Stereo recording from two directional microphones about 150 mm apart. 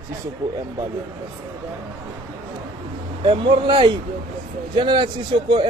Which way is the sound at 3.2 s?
35° right (ahead or behind).